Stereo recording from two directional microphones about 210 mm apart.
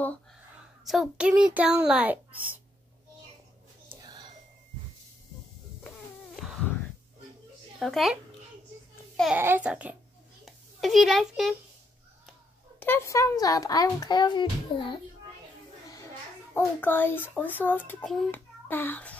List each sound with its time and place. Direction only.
0.8 s a child's voice: centre (ahead or behind)
3.9 s a sound: 20° right (ahead or behind)
5.9 s music: centre (ahead or behind)
7.8 s a child's voice: centre (ahead or behind)
9.1 s babbling: centre (ahead or behind)
9.4 s a child's voice: 10° right (ahead or behind)
10.4 s a sound: centre (ahead or behind)
12.8 s a child's voice: 10° left (ahead or behind)
16.5 s a child's voice: 10° left (ahead or behind)